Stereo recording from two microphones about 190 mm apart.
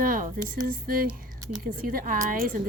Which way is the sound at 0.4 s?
50° right (ahead or behind).